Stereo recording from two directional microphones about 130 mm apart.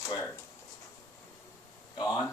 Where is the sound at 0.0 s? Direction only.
20° left (ahead or behind).